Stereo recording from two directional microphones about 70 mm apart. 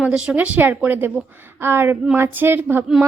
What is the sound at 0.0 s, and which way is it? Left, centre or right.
A woman's voice, centre.